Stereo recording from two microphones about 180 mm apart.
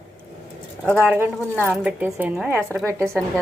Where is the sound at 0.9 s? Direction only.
10° right (ahead or behind).